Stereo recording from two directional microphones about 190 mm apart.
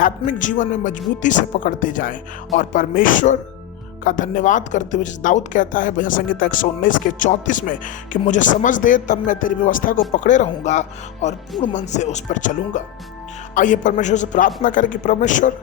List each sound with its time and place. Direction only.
0.0 s a woman's voice: 40° left (ahead or behind)